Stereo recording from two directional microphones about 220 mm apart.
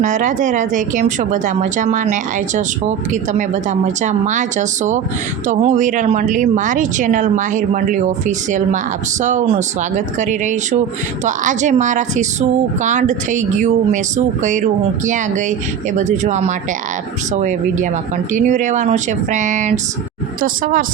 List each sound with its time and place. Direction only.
0.0 s speech: 35° right (ahead or behind)